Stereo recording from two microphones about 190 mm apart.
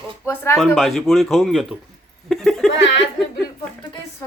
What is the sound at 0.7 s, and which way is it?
Speech, centre (ahead or behind).